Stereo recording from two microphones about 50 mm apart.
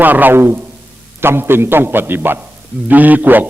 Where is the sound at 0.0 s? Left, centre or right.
Right.